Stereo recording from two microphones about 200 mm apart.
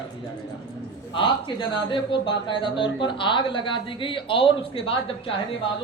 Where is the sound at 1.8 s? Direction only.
25° left (ahead or behind).